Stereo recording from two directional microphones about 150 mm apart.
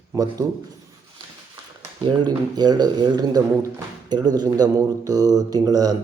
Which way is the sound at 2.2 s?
30° right (ahead or behind).